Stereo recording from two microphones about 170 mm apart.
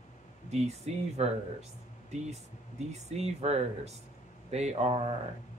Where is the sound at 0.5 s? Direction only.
40° right (ahead or behind).